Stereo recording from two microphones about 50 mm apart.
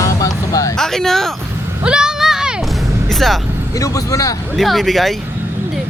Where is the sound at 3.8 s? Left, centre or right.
Left.